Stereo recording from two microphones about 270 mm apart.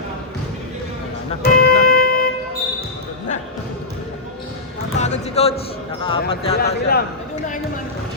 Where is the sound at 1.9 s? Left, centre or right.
Left.